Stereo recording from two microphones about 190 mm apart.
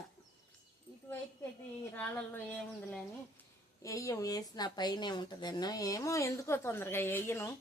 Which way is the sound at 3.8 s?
15° left (ahead or behind).